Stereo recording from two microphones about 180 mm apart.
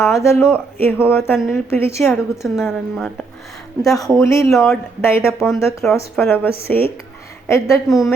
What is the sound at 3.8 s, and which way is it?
Speech, 20° left (ahead or behind).